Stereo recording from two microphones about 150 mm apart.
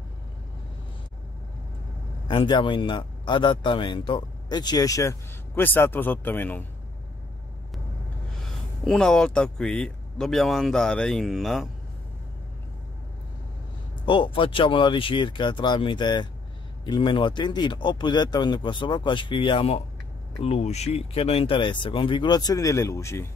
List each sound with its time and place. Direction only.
2.2 s a man's voice: 30° left (ahead or behind); by 6.6 s 15° left (ahead or behind)
8.8 s speech: 5° left (ahead or behind)
14.0 s speech: 35° left (ahead or behind)